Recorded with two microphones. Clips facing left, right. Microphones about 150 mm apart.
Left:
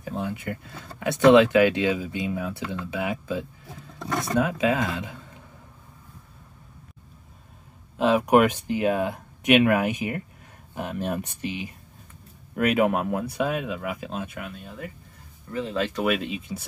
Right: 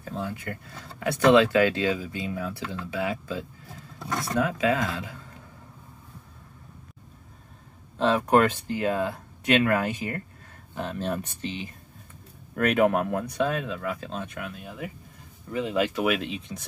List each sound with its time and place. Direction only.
0.0 s speech: 15° left (ahead or behind)
8.0 s speech: 10° left (ahead or behind); by 16.0 s 15° right (ahead or behind)
16.0 s speech: centre (ahead or behind)